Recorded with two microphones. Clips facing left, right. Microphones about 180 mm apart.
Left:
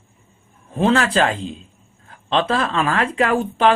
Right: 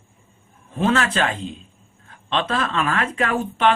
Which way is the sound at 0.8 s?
30° left (ahead or behind).